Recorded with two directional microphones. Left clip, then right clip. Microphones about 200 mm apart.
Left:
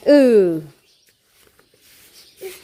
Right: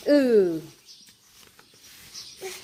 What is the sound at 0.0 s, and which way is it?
Speech, 40° left (ahead or behind).